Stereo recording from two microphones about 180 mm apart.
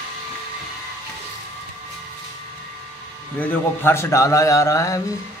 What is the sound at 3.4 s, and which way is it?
A man's voice, 15° left (ahead or behind).